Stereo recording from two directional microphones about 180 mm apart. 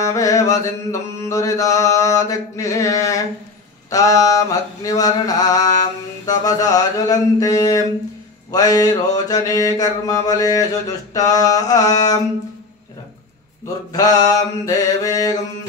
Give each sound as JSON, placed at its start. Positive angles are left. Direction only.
{"t": 0.0, "sound": "mantra", "side_deg": 15}
{"t": 13.9, "sound": "mantra", "side_deg": 20}